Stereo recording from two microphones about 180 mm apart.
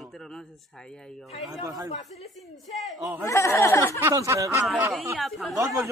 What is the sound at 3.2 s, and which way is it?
Speech, 15° left (ahead or behind).